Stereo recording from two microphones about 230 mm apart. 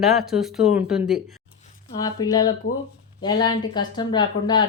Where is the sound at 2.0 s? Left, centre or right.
Centre.